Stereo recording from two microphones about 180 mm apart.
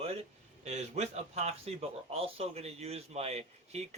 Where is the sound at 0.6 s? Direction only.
40° right (ahead or behind).